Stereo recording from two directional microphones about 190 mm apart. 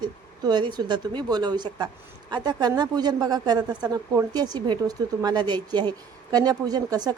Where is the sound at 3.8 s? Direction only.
10° right (ahead or behind).